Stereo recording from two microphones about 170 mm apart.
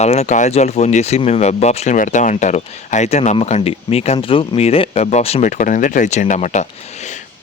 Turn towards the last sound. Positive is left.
turn(degrees=45)  # may be behind; listen again after turning